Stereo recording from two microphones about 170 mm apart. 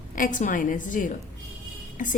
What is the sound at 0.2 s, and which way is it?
A woman's voice, 50° left (ahead or behind).